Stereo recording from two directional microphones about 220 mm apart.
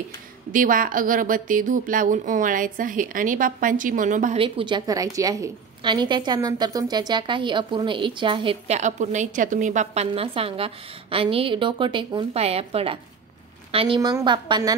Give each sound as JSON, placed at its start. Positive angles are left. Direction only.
{"t": 0.5, "sound": "a woman's voice", "side_deg": -35}
{"t": 4.4, "sound": "a woman's voice", "side_deg": -20}